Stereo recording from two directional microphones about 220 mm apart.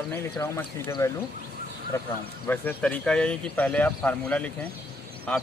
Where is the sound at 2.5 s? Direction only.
10° left (ahead or behind).